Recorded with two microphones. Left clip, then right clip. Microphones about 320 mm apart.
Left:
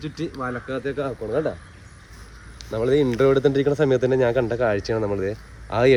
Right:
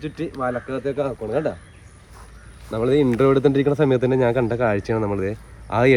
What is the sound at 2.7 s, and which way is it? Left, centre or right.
Speech, right.